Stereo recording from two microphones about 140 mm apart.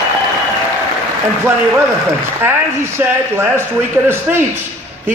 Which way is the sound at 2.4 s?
15° right (ahead or behind).